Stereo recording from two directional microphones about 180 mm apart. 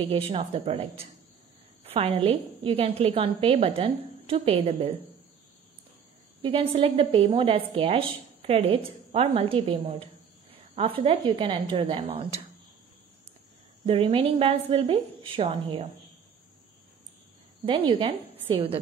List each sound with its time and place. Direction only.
0.0 s a woman's voice: 30° right (ahead or behind)
6.4 s a woman's voice: 30° right (ahead or behind)
13.8 s a woman's voice: 30° right (ahead or behind)
17.6 s a woman's voice: 30° right (ahead or behind)